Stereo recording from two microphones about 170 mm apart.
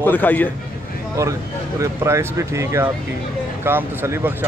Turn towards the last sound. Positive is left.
turn(degrees=-15)  # may be behind; listen again after turning